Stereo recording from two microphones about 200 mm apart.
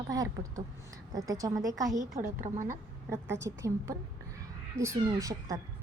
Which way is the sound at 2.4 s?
40° right (ahead or behind).